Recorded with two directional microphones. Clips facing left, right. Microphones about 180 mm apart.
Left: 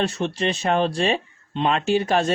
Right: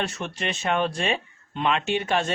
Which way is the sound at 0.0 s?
30° left (ahead or behind).